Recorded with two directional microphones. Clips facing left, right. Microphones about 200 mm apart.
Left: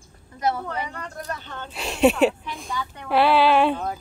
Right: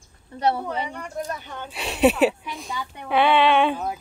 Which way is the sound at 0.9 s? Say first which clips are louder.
Right 3 dB; 10° right (ahead or behind).